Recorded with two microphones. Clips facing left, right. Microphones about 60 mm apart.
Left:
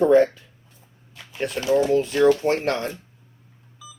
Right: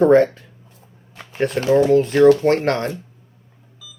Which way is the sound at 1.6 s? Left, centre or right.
Right.